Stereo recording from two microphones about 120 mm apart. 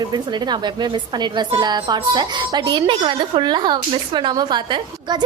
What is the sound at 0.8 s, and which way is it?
A woman's voice, 40° right (ahead or behind).